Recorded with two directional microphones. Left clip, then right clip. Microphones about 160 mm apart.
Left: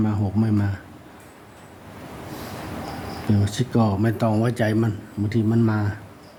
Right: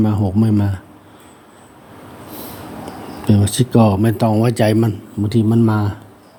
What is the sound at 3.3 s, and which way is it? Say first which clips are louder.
Speech: right 9 dB; 30° right (ahead or behind).